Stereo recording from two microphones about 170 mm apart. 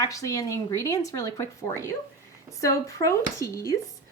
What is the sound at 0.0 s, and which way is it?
Speech, 20° left (ahead or behind).